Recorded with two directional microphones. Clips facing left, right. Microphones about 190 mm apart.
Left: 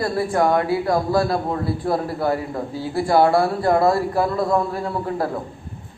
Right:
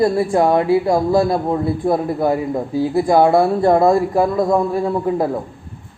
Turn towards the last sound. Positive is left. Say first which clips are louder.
# right 6 dB
turn(degrees=-20)  # may be behind; listen again after turning